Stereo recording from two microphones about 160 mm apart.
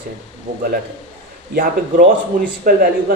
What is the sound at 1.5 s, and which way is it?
Speech, 65° right (ahead or behind).